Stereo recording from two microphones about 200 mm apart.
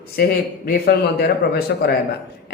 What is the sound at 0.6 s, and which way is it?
A man's voice, 50° left (ahead or behind).